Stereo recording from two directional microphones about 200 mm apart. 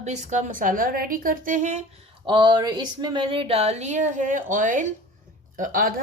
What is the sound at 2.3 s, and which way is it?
A woman's voice, 25° right (ahead or behind).